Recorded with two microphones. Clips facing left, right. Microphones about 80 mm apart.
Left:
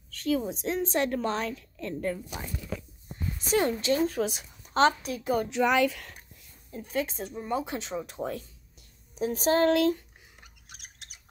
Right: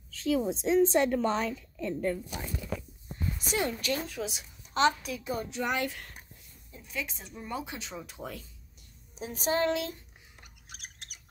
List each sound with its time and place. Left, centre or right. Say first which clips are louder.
0.1 s a woman's voice: even; centre
3.3 s a woman's voice: left 6 dB; left
4.2 s a woman's voice: left 7 dB; left
5.2 s speech: left 8 dB; left
6.7 s speech: left 8 dB; left
7.3 s a woman's voice: left 6 dB; left
8.2 s speech: left 7 dB; centre
9.2 s speech: left 5 dB; left